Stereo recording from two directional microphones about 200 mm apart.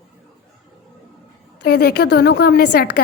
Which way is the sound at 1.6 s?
55° left (ahead or behind).